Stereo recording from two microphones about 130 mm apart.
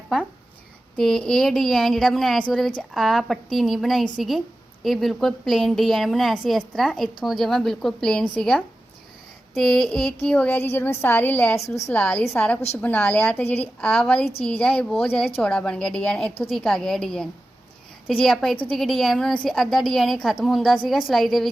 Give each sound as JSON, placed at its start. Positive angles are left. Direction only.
{"t": 0.9, "sound": "a woman's voice", "side_deg": 5}